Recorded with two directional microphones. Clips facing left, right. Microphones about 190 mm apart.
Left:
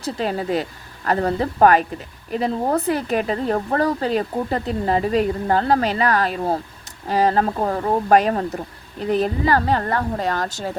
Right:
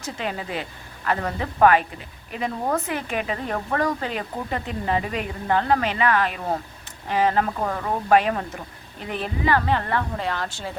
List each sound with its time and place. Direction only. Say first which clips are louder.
0.0 s speech: left 6 dB; 35° left (ahead or behind)